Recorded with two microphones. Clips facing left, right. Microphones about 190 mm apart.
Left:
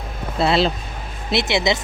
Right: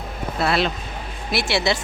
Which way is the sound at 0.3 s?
25° left (ahead or behind).